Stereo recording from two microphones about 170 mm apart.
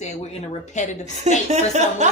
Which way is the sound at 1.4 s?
45° right (ahead or behind).